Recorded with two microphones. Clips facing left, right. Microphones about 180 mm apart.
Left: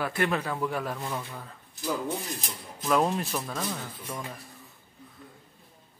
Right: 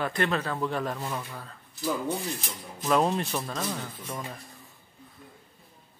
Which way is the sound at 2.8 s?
Centre (ahead or behind).